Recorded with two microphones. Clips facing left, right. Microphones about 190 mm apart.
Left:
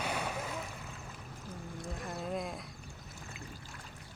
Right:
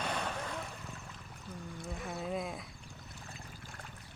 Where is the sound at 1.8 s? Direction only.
Centre (ahead or behind).